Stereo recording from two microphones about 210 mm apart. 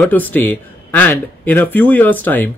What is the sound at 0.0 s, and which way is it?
Speech, 10° left (ahead or behind).